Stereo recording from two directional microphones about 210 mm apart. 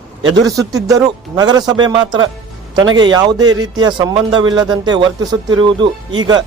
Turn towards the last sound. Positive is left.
turn(degrees=-20)  # may be behind; listen again after turning